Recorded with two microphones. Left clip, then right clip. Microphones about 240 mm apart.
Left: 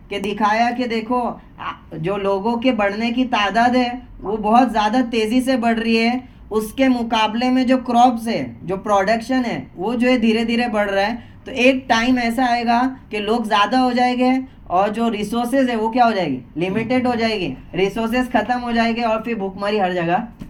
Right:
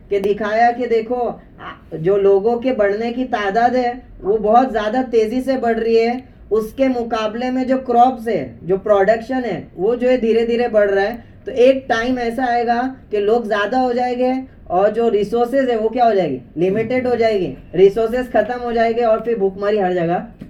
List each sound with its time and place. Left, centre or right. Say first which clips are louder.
0.1 s speech: right 1 dB; left
2.0 s speech: right 7 dB; left